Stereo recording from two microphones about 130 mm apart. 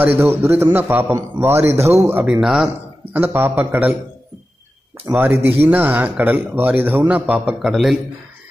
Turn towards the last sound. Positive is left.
turn(degrees=0)  # may be behind; listen again after turning